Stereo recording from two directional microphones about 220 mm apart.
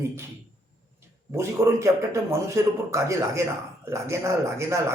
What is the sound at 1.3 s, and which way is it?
A man's voice, 10° right (ahead or behind).